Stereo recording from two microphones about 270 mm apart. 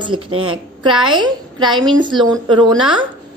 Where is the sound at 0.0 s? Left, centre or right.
Centre.